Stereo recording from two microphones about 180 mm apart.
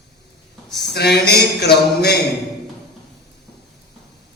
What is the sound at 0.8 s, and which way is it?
A man's voice, 65° left (ahead or behind).